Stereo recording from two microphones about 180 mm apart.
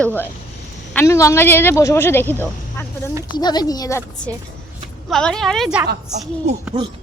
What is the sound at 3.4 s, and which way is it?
Speech, 25° left (ahead or behind).